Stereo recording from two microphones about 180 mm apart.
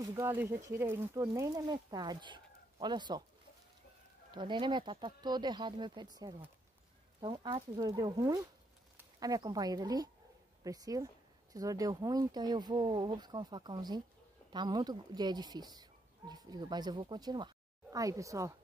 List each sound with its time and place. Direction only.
0.0 s speech: 20° right (ahead or behind)
4.3 s speech: 25° right (ahead or behind)